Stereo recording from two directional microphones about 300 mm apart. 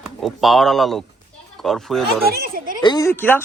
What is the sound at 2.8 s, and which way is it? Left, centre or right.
Speech, centre.